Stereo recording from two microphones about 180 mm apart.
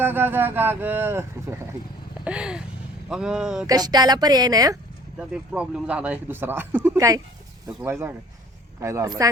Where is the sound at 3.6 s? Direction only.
20° right (ahead or behind).